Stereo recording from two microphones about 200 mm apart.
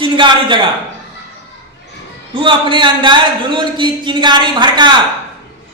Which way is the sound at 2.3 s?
25° right (ahead or behind).